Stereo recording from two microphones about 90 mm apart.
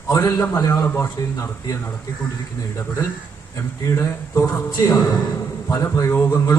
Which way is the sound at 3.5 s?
35° left (ahead or behind).